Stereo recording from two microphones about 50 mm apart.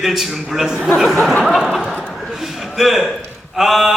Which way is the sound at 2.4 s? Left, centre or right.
Centre.